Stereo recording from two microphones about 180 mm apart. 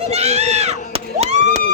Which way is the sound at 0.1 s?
35° right (ahead or behind).